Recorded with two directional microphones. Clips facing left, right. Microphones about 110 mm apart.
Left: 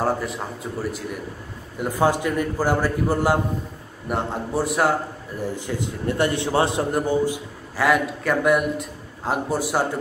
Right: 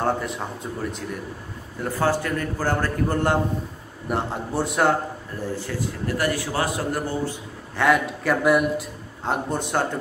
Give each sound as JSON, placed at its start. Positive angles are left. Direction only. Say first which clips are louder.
{"t": 0.0, "sound": "a man's voice", "louder": "left 1 dB", "side_deg": 0}
{"t": 1.8, "sound": "a man's voice", "louder": "left 2 dB", "side_deg": 15}
{"t": 5.5, "sound": "a man's voice", "louder": "right 2 dB", "side_deg": 20}
{"t": 7.7, "sound": "a man's voice", "louder": "even", "side_deg": 0}